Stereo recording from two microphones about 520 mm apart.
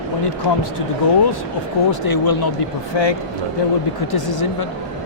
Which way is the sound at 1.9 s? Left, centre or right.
Left.